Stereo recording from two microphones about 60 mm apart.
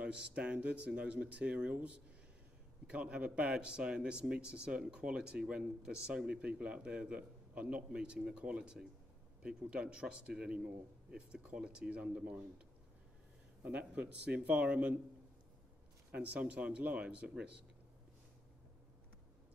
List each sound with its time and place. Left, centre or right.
0.0 s speech: centre
16.1 s speech: right